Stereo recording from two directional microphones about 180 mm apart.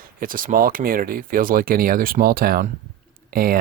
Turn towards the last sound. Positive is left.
turn(degrees=-55)  # may be behind; listen again after turning